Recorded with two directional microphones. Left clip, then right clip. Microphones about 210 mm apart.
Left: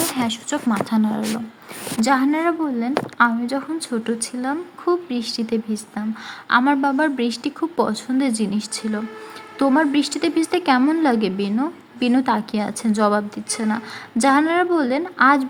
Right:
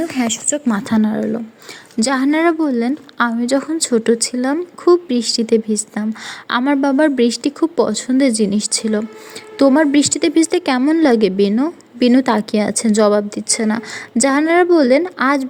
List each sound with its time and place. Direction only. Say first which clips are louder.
0.7 s a woman's voice: right 1 dB; 35° right (ahead or behind)